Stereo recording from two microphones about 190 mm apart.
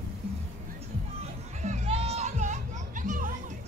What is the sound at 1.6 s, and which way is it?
Music, 35° right (ahead or behind).